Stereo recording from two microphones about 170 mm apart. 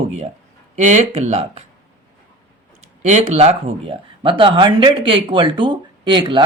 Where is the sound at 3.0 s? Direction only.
40° right (ahead or behind).